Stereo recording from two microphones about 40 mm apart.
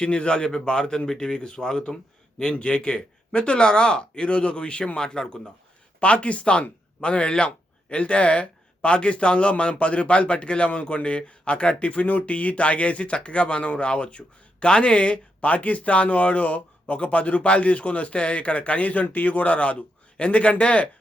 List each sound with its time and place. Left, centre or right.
0.0 s speech: left
6.0 s speech: left